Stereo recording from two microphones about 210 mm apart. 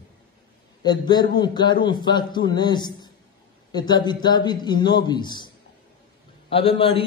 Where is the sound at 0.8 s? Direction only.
20° left (ahead or behind).